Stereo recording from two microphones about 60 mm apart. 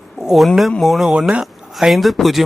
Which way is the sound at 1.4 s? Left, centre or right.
Centre.